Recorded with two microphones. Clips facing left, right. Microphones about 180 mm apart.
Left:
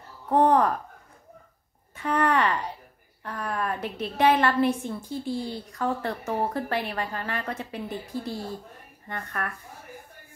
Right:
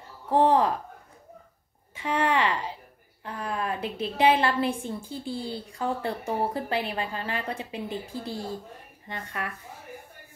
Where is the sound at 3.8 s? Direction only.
10° right (ahead or behind).